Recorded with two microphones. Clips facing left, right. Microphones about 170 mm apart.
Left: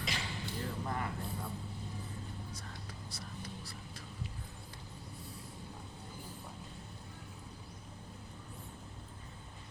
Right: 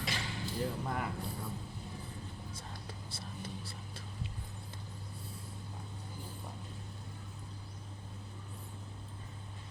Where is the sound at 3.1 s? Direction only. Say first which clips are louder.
Right 2 dB; 25° right (ahead or behind).